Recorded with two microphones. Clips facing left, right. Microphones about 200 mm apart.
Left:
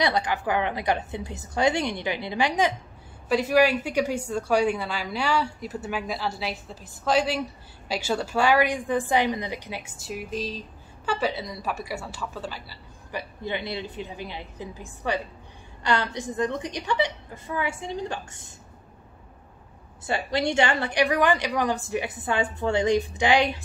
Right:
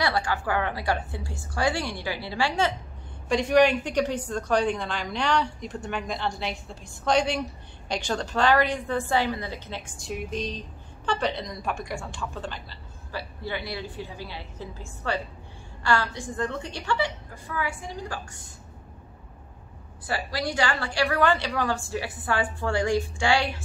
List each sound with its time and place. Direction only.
0.0 s a woman's voice: 20° left (ahead or behind)
3.3 s a woman's voice: 5° left (ahead or behind)
13.1 s a woman's voice: 20° left (ahead or behind)
20.1 s a woman's voice: 25° left (ahead or behind)